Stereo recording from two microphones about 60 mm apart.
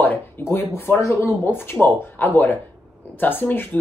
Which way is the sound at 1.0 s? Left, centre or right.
Left.